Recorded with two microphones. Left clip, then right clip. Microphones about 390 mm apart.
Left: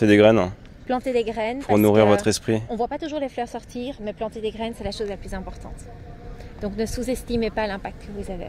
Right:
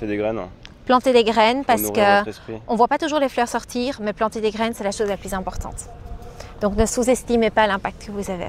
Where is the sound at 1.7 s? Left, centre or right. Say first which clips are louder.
Even; left.